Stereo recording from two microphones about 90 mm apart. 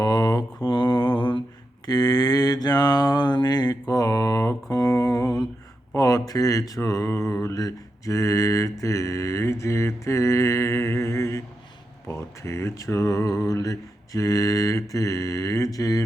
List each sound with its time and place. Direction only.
0.0 s mantra: 45° left (ahead or behind); by 1.4 s 60° left (ahead or behind)
1.9 s mantra: 45° left (ahead or behind)
6.0 s a sound: 45° left (ahead or behind)
12.0 s speech: 30° left (ahead or behind)